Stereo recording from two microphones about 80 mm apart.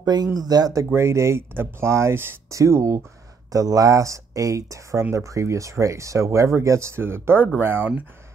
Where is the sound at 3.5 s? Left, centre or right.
Right.